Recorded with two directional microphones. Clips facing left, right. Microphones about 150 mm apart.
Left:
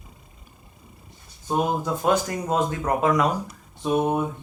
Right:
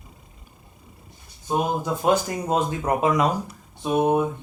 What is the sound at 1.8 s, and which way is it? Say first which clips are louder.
Speech: right 1 dB; 20° right (ahead or behind).